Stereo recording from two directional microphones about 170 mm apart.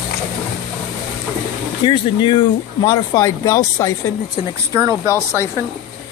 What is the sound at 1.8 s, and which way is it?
Speech, 30° left (ahead or behind).